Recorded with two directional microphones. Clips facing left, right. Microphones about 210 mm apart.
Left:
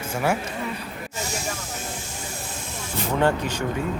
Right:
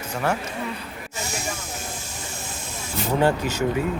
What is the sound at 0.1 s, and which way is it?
Speech, 10° left (ahead or behind).